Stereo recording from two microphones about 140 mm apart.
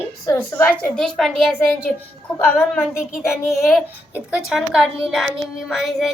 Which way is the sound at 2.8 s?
Centre (ahead or behind).